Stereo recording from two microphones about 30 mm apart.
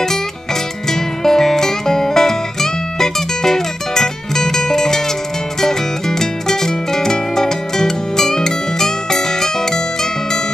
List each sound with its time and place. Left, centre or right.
0.8 s music: centre